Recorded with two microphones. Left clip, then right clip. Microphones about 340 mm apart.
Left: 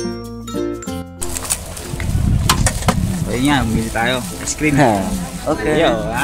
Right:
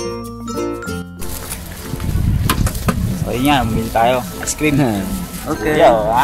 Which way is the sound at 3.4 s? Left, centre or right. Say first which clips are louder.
Right 2 dB; centre.